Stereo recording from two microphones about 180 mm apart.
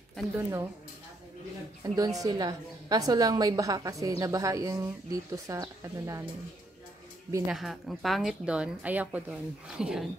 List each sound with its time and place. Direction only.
0.4 s speech: 15° right (ahead or behind)
1.8 s a woman's voice: 20° right (ahead or behind)
7.4 s a woman's voice: centre (ahead or behind)